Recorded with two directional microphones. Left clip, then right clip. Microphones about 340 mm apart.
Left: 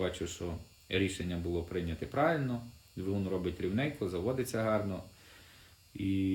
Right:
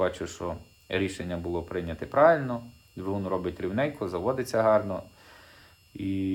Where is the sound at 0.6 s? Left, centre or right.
Centre.